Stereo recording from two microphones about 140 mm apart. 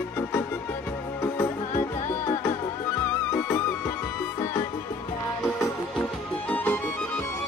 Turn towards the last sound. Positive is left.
turn(degrees=10)  # may be behind; listen again after turning